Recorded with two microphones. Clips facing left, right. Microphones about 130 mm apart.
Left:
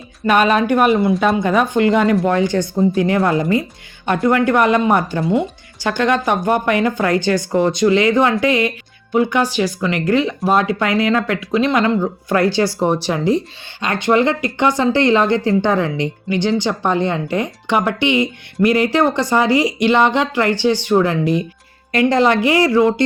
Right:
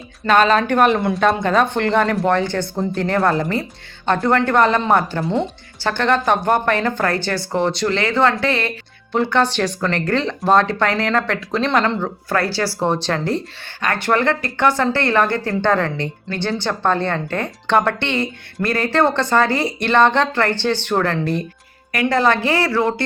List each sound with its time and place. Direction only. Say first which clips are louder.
0.3 s speech: left 1 dB; 15° left (ahead or behind)